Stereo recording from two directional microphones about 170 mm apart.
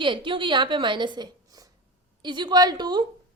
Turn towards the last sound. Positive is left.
turn(degrees=-25)  # may be behind; listen again after turning